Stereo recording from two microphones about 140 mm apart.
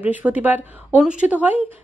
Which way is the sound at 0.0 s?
10° right (ahead or behind).